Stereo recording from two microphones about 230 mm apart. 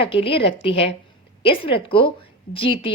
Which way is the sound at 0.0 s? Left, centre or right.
Left.